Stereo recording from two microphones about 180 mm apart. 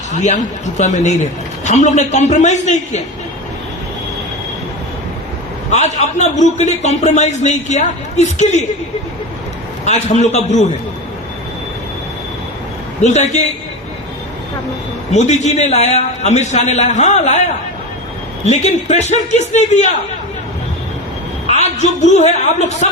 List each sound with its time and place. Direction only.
0.1 s a man's voice: 40° left (ahead or behind)
5.7 s a man's voice: 40° left (ahead or behind)
9.8 s a man's voice: 40° left (ahead or behind)
13.0 s a man's voice: 40° left (ahead or behind)
15.1 s a man's voice: 40° left (ahead or behind)
21.4 s a man's voice: 40° left (ahead or behind)